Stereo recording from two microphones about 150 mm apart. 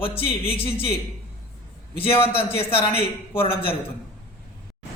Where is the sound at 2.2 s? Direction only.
40° left (ahead or behind).